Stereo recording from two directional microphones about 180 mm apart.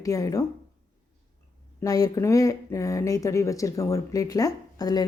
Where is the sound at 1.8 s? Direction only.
20° left (ahead or behind).